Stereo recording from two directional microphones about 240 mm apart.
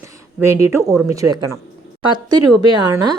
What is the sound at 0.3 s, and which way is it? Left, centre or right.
Speech, centre.